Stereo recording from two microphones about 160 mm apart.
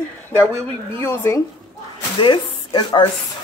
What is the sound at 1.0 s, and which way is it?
Speech, 15° left (ahead or behind).